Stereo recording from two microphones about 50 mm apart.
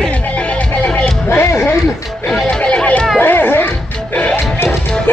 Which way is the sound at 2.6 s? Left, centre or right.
Left.